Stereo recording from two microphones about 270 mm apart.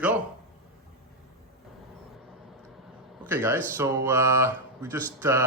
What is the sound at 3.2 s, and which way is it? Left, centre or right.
Speech, centre.